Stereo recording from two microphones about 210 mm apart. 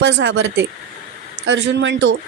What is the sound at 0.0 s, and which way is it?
A woman's voice, 60° right (ahead or behind).